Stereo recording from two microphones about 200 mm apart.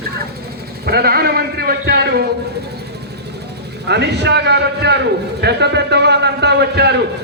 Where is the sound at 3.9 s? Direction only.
55° right (ahead or behind).